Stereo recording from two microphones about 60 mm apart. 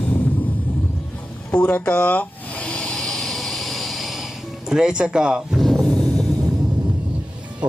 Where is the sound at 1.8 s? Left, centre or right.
Left.